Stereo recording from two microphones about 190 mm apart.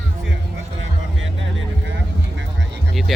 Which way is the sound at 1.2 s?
80° right.